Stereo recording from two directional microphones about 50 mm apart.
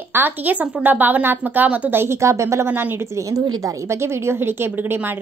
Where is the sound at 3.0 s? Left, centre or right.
Right.